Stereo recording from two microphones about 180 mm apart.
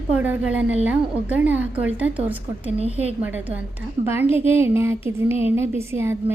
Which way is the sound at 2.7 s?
35° right (ahead or behind).